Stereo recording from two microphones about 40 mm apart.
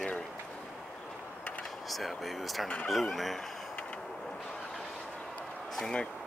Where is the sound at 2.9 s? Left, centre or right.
Centre.